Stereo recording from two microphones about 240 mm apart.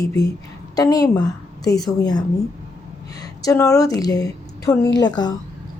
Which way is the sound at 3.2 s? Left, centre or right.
Centre.